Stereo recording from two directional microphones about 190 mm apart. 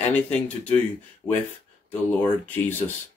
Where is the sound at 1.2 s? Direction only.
15° left (ahead or behind).